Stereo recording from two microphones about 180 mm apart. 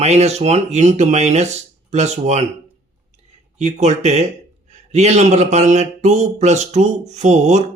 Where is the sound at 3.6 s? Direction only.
40° right (ahead or behind).